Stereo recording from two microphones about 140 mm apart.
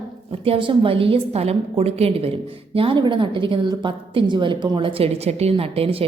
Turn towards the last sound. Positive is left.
turn(degrees=-45)  # may be behind; listen again after turning